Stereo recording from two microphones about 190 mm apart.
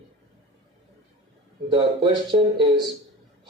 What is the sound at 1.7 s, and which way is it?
Speech, 25° right (ahead or behind).